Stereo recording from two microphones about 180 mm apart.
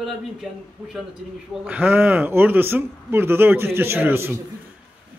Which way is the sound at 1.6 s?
10° right (ahead or behind).